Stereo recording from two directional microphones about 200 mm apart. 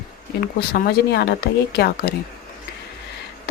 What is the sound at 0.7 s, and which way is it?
Speech, 50° left (ahead or behind).